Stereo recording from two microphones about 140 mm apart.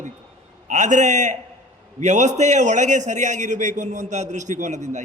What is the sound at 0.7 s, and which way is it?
A man's voice, 60° right (ahead or behind).